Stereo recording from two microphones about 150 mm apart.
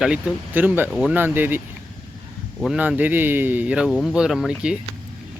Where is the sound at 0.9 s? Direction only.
Centre (ahead or behind).